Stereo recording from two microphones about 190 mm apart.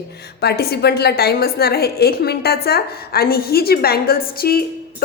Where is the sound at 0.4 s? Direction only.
55° left (ahead or behind).